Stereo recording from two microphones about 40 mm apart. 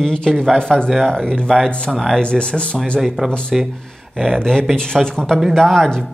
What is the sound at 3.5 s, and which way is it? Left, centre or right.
Speech, centre.